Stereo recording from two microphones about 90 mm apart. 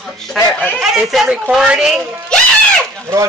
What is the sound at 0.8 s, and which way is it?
Speech, 5° right (ahead or behind).